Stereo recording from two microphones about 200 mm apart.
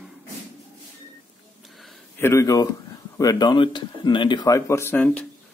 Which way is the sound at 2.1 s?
15° left (ahead or behind).